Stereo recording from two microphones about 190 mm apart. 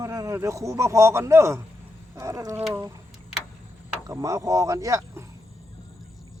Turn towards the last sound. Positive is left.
turn(degrees=-15)  # may be behind; listen again after turning